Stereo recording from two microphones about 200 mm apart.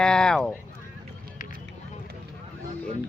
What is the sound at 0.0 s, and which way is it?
Speech, 5° left (ahead or behind).